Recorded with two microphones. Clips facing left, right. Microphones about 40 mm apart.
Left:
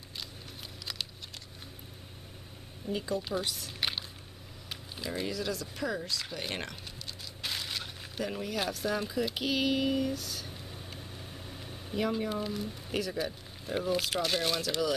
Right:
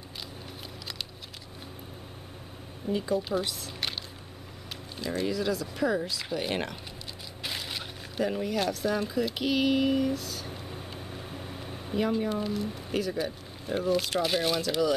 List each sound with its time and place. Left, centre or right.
2.9 s speech: centre
4.9 s speech: centre
10.5 s a sound: right
12.1 s speech: centre